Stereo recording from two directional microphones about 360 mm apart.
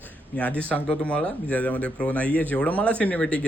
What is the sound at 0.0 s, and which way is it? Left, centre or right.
Speech, centre.